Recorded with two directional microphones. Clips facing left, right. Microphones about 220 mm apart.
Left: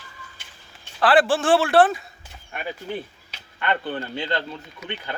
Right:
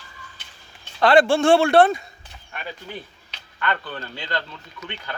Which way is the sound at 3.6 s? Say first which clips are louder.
Left 2 dB; 25° left (ahead or behind).